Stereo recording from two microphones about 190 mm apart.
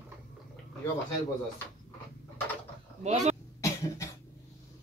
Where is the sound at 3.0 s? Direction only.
35° right (ahead or behind).